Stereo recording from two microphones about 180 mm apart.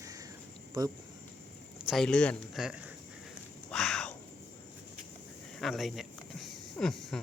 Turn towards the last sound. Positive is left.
turn(degrees=5)  # may be behind; listen again after turning